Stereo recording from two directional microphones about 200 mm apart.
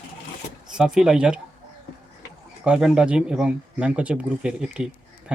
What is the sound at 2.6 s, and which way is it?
Speech, 5° right (ahead or behind).